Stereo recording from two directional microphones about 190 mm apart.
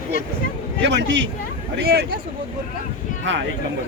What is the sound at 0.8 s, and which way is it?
Speech, 65° right (ahead or behind).